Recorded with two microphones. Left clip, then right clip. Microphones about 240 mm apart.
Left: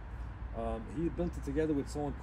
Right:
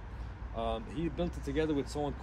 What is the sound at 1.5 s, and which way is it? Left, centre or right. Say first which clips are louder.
Speech: right 1 dB; centre.